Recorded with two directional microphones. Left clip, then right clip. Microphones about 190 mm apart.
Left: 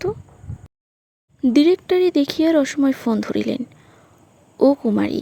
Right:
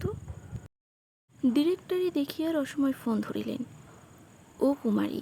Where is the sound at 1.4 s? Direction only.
30° left (ahead or behind).